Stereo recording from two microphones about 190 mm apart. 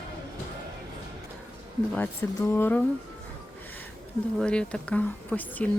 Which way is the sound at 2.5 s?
10° left (ahead or behind).